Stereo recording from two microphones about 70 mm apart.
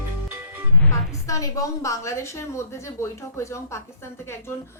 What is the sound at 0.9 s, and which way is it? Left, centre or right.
A woman's voice, left.